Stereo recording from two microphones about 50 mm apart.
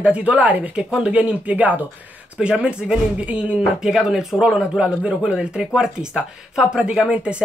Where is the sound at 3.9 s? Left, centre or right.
Centre.